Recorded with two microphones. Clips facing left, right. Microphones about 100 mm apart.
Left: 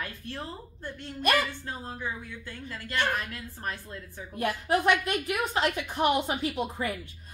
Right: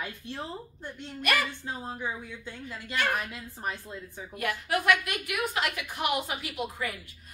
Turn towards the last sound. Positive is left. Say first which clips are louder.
# left 4 dB
turn(degrees=30)  # may be behind; listen again after turning